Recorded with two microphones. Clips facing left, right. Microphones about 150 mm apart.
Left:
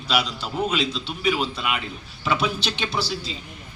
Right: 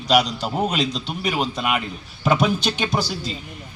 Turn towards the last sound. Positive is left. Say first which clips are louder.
# right 3 dB
turn(degrees=-45)  # may be behind; listen again after turning